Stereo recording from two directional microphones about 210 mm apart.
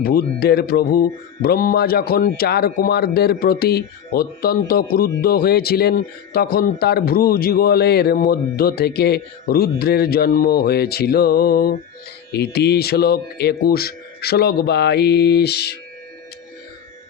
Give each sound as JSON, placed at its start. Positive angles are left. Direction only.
{"t": 0.0, "sound": "speech", "side_deg": 45}